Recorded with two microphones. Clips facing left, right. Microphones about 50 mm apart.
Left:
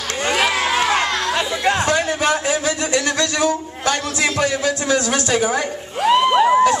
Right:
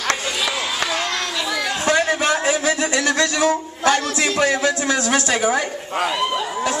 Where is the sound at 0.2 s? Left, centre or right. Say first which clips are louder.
Left 5 dB; left.